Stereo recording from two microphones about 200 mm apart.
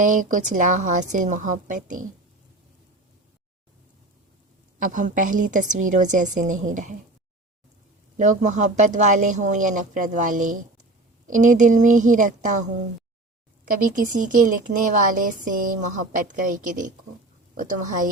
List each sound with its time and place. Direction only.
0.0 s speech: 40° right (ahead or behind)
4.8 s speech: 40° right (ahead or behind)
8.2 s speech: 40° right (ahead or behind)
13.9 s speech: 40° right (ahead or behind)